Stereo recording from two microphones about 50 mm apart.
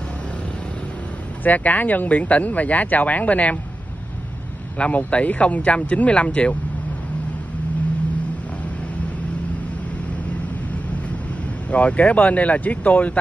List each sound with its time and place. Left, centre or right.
1.4 s speech: left
4.7 s speech: left
11.7 s speech: left